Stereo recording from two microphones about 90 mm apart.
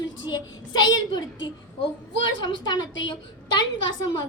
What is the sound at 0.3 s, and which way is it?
Speech, 55° left (ahead or behind).